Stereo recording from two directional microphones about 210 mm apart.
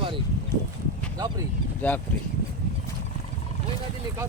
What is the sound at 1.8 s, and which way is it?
Speech, 5° left (ahead or behind).